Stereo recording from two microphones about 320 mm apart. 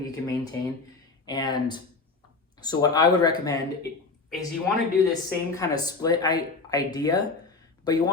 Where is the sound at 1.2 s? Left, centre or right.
Centre.